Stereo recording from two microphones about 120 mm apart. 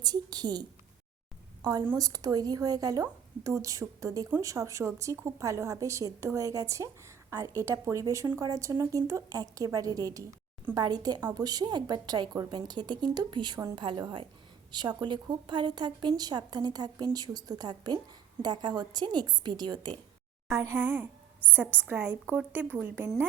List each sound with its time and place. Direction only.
0.0 s a woman's voice: 35° right (ahead or behind)
2.0 s a woman's voice: 30° right (ahead or behind)
20.5 s a woman's voice: 20° right (ahead or behind)